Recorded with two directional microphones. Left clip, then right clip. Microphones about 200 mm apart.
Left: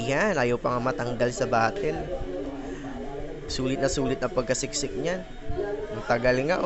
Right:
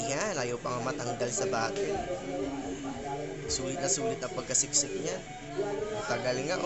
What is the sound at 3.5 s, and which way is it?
A woman's voice, 35° left (ahead or behind).